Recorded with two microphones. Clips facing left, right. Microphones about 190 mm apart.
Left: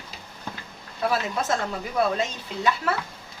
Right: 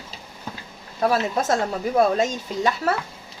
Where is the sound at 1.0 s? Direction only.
45° right (ahead or behind).